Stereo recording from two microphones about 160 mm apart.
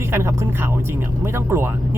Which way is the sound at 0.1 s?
15° right (ahead or behind).